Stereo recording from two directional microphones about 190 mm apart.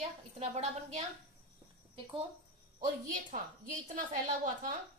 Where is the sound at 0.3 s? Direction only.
35° right (ahead or behind).